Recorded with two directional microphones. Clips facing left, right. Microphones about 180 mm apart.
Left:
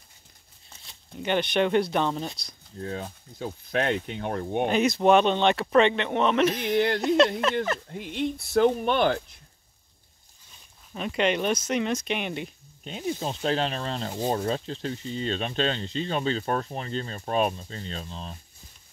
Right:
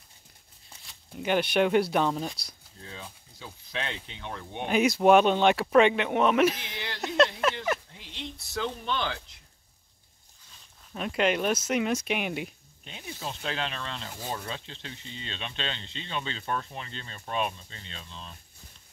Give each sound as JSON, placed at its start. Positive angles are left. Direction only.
{"t": 1.1, "sound": "speech", "side_deg": -5}
{"t": 2.8, "sound": "speech", "side_deg": 45}
{"t": 4.6, "sound": "speech", "side_deg": -10}
{"t": 8.0, "sound": "speech", "side_deg": 55}
{"t": 10.9, "sound": "speech", "side_deg": 0}
{"t": 12.8, "sound": "speech", "side_deg": 40}